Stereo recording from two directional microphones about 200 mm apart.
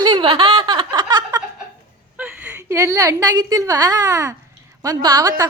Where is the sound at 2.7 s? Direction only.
15° right (ahead or behind).